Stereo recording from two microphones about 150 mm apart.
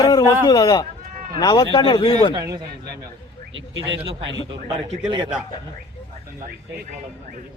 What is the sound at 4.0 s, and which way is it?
Speech, 35° right (ahead or behind).